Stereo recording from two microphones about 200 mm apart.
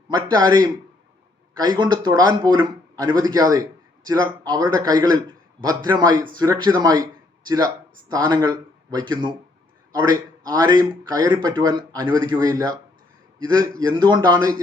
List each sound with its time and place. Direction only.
0.1 s speech: 20° right (ahead or behind)